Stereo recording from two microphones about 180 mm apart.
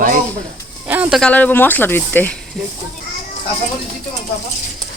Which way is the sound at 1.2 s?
10° left (ahead or behind).